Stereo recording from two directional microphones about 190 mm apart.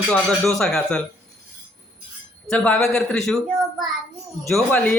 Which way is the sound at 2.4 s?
5° left (ahead or behind).